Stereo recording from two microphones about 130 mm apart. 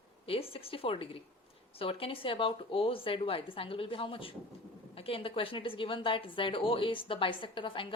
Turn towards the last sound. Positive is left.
turn(degrees=40)  # may be behind; listen again after turning